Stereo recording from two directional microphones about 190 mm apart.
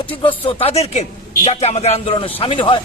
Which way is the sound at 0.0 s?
25° left (ahead or behind).